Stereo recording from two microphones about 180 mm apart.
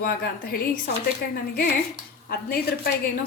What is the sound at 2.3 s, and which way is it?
Speech, 60° left (ahead or behind).